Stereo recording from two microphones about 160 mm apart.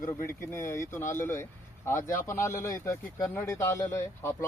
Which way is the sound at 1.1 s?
15° left (ahead or behind).